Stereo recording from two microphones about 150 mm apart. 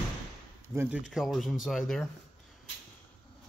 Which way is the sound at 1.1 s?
Centre (ahead or behind).